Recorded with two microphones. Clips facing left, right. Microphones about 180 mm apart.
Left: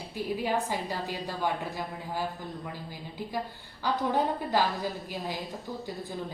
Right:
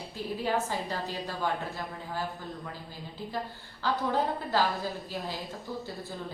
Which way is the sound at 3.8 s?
15° left (ahead or behind).